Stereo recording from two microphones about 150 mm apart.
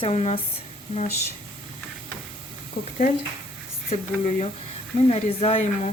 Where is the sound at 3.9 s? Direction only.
50° left (ahead or behind).